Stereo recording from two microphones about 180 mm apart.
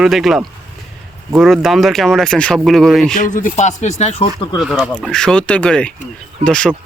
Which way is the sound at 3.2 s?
50° left (ahead or behind).